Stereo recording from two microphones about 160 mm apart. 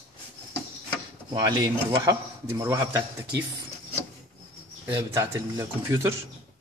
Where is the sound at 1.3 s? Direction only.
25° right (ahead or behind).